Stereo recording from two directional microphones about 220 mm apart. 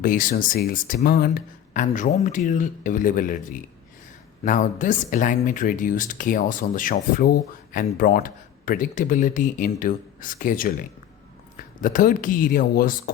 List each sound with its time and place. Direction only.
0.0 s speech: 40° left (ahead or behind)